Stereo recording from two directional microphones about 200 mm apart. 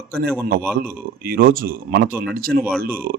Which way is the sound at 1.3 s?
50° right (ahead or behind).